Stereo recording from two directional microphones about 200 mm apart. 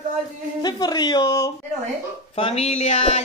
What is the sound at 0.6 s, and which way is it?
Speech, 20° left (ahead or behind).